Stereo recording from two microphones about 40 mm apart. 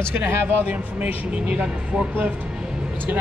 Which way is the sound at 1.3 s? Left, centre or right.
Right.